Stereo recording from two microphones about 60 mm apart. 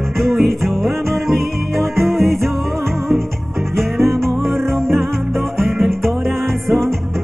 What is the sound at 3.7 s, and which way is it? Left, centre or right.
Music, right.